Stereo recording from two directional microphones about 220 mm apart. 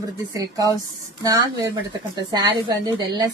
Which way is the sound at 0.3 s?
15° right (ahead or behind).